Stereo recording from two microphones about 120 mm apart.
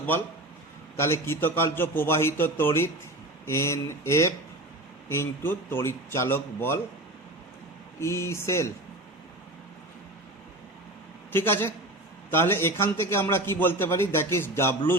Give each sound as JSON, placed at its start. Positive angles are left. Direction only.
{"t": 0.9, "sound": "a man's voice", "side_deg": 20}
{"t": 8.0, "sound": "a man's voice", "side_deg": 25}
{"t": 11.3, "sound": "a man's voice", "side_deg": 20}